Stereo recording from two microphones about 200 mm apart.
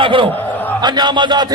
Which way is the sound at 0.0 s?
25° right (ahead or behind).